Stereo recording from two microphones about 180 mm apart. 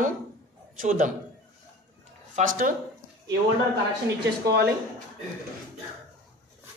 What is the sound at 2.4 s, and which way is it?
Speech, 50° right (ahead or behind).